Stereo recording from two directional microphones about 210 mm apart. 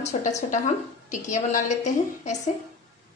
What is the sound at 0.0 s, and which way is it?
Speech, 35° left (ahead or behind).